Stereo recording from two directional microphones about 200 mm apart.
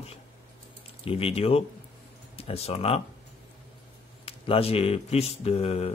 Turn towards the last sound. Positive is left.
turn(degrees=30)  # may be behind; listen again after turning